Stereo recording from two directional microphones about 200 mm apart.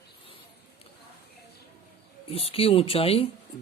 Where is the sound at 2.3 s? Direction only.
30° left (ahead or behind).